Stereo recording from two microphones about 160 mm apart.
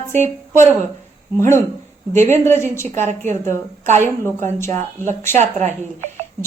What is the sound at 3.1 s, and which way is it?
Speech, 50° right (ahead or behind).